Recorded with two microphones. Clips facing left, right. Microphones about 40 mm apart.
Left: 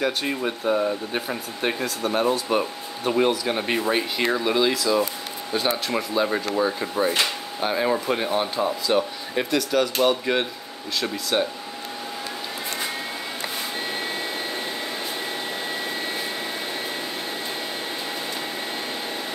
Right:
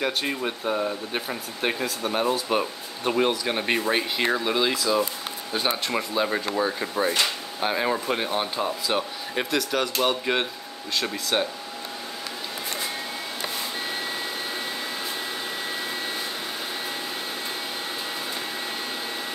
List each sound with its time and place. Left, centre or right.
0.0 s speech: centre